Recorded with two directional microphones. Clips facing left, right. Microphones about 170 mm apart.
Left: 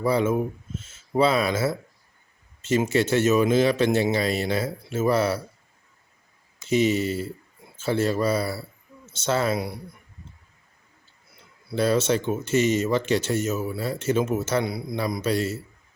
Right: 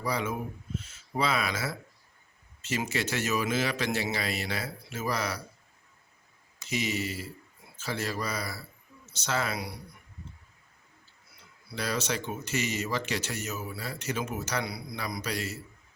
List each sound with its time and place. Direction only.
0.0 s speech: 30° left (ahead or behind)
2.7 s speech: 30° left (ahead or behind)
6.7 s speech: 30° left (ahead or behind)
11.8 s speech: 30° left (ahead or behind)